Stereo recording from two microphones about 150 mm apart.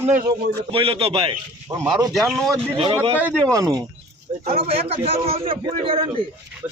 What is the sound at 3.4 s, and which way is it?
Speech, 25° right (ahead or behind).